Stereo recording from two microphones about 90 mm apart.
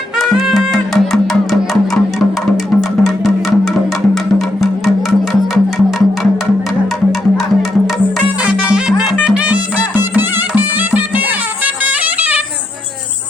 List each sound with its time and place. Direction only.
0.2 s music: centre (ahead or behind)
3.0 s music: centre (ahead or behind)
8.7 s music: 5° right (ahead or behind)